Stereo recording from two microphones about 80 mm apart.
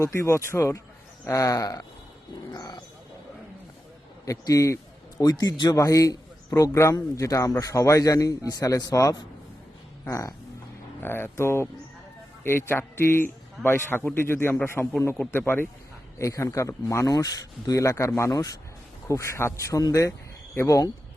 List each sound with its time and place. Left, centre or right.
0.0 s a man's voice: left
2.5 s speech: left
4.3 s a man's voice: left
5.7 s a man's voice: left
16.1 s speech: left